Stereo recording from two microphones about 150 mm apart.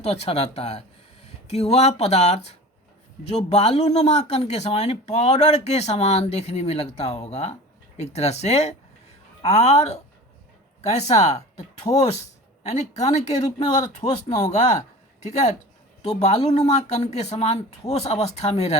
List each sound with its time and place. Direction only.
0.0 s speech: 45° left (ahead or behind)
12.6 s speech: 50° left (ahead or behind)
15.3 s speech: 50° left (ahead or behind)